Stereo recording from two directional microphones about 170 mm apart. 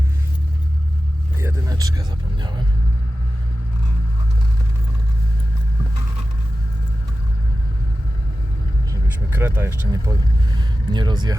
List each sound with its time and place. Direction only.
1.4 s vehicle: 15° right (ahead or behind)
8.9 s speech: 15° right (ahead or behind)
10.6 s vehicle: 25° right (ahead or behind)